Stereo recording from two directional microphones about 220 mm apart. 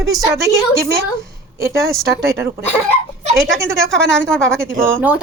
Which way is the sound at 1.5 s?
15° right (ahead or behind).